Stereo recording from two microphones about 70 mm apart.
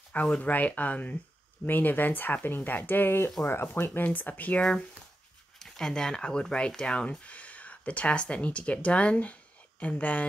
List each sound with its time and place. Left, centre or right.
0.2 s speech: centre
5.6 s speech: centre